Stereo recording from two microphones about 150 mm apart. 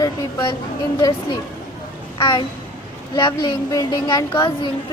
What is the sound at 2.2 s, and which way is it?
A child's voice, 35° left (ahead or behind).